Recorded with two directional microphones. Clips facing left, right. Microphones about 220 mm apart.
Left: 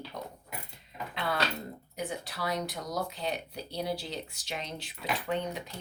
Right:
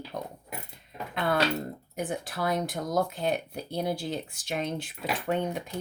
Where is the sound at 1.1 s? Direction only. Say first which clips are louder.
Right 6 dB; 50° right (ahead or behind).